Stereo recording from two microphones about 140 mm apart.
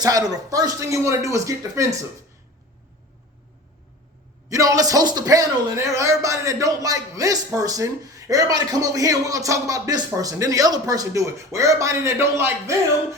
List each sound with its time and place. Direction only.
0.0 s a man's voice: 25° right (ahead or behind)
4.4 s a man's voice: 25° right (ahead or behind)